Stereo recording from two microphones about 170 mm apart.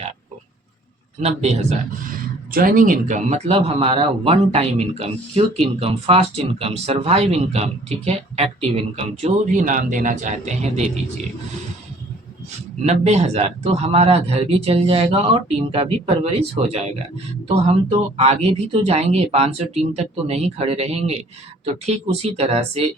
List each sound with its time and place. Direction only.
1.2 s speech: 40° right (ahead or behind)
2.5 s speech: 55° right (ahead or behind)
12.8 s speech: 40° right (ahead or behind)